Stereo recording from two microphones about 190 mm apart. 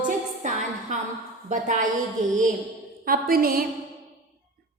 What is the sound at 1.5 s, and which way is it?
A woman's voice, 40° right (ahead or behind).